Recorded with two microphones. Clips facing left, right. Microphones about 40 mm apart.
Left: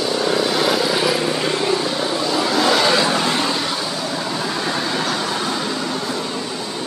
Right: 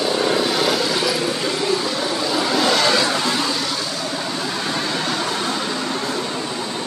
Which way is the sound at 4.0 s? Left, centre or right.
Centre.